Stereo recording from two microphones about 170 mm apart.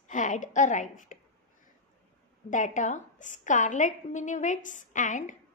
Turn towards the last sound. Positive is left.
turn(degrees=50)  # may be behind; listen again after turning